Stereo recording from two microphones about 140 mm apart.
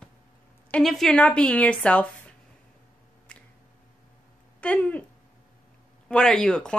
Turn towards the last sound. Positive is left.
turn(degrees=5)  # may be behind; listen again after turning